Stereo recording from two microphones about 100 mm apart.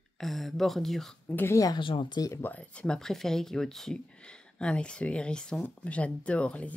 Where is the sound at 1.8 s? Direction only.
55° left (ahead or behind).